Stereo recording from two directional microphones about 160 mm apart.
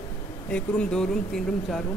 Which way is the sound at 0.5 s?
5° left (ahead or behind).